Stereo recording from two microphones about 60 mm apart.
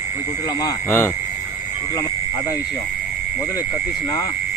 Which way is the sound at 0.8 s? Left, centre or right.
Left.